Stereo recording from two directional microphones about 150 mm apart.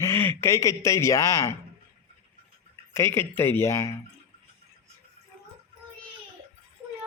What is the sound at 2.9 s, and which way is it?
Speech, 15° left (ahead or behind).